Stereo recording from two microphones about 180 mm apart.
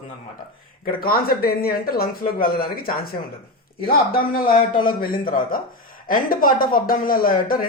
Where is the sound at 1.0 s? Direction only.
55° left (ahead or behind).